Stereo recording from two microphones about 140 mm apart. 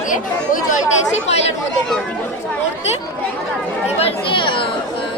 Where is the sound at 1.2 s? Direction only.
50° left (ahead or behind).